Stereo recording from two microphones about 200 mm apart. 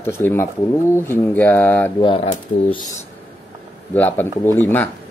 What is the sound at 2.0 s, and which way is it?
Speech, 25° left (ahead or behind).